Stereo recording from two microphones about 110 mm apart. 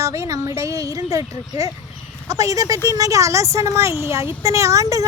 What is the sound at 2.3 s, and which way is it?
A child's voice, 30° right (ahead or behind).